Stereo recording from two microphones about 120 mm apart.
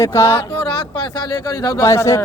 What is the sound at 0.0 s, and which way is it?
Speech, 25° left (ahead or behind).